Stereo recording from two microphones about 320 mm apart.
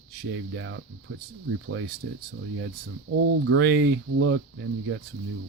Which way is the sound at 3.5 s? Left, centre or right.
Right.